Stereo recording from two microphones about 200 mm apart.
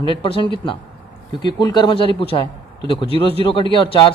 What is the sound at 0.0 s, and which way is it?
A man's voice, 25° left (ahead or behind).